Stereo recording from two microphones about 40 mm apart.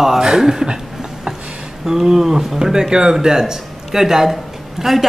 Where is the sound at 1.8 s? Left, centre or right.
Centre.